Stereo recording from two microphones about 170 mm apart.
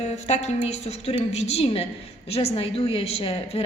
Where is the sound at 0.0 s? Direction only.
40° left (ahead or behind).